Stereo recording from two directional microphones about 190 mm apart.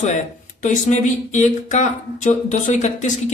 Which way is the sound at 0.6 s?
40° left (ahead or behind).